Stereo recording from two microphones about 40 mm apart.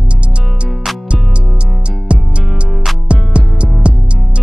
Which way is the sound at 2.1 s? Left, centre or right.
Right.